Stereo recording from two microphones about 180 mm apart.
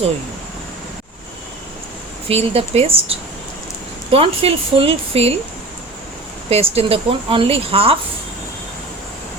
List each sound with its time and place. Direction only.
2.3 s speech: 35° right (ahead or behind)
6.5 s speech: 35° right (ahead or behind)